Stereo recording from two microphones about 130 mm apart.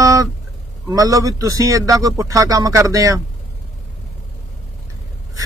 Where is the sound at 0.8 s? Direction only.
25° right (ahead or behind).